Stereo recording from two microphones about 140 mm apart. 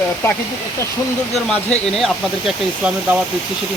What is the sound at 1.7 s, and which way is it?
Speech, centre (ahead or behind).